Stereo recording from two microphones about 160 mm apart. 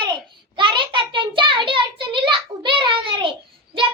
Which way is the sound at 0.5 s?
30° right (ahead or behind).